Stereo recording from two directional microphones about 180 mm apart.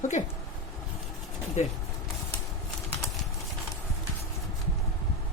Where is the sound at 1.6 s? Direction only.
40° left (ahead or behind).